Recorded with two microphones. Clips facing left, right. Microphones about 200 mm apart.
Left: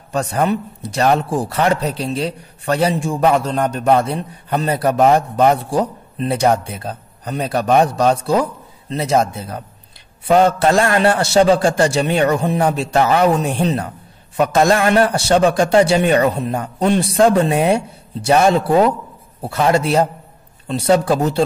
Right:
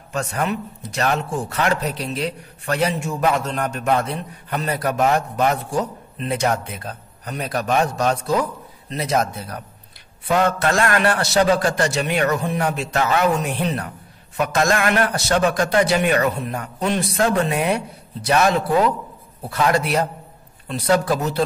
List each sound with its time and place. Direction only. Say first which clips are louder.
0.1 s a man's voice: left 6 dB; 35° left (ahead or behind)